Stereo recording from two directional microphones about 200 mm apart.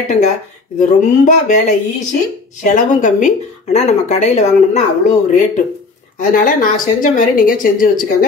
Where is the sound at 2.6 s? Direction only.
40° left (ahead or behind).